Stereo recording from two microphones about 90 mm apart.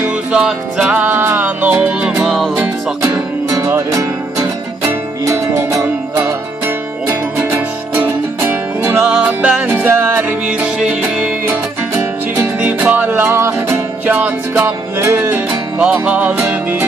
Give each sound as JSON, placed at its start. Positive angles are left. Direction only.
{"t": 0.3, "sound": "music", "side_deg": -10}
{"t": 0.9, "sound": "music", "side_deg": -25}
{"t": 2.2, "sound": "music", "side_deg": 0}
{"t": 3.7, "sound": "music", "side_deg": -30}
{"t": 5.5, "sound": "music", "side_deg": -30}
{"t": 9.0, "sound": "music", "side_deg": -10}
{"t": 14.0, "sound": "music", "side_deg": -20}
{"t": 15.8, "sound": "music", "side_deg": -10}